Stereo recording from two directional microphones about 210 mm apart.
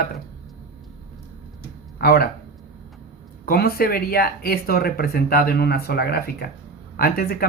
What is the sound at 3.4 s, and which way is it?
Speech, 45° left (ahead or behind).